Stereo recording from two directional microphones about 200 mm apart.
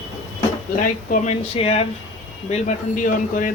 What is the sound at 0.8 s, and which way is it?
Speech, 40° left (ahead or behind).